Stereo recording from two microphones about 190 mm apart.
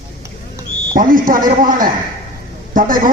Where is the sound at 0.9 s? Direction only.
45° right (ahead or behind).